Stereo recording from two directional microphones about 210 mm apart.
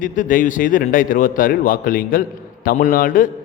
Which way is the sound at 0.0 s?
40° left (ahead or behind).